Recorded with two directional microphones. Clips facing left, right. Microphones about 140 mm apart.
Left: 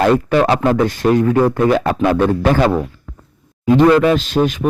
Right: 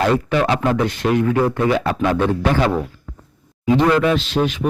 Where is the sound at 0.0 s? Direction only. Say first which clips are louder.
Left 4 dB; 45° left (ahead or behind).